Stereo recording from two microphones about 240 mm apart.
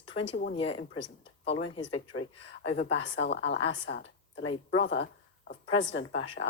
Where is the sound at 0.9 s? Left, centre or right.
Left.